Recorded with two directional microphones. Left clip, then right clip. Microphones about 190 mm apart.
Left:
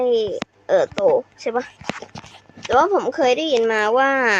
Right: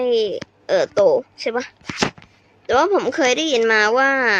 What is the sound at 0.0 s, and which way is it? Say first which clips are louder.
Speech: even; 10° right (ahead or behind).